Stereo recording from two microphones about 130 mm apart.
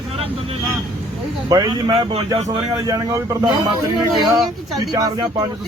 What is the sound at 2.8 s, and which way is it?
Speech, 25° right (ahead or behind).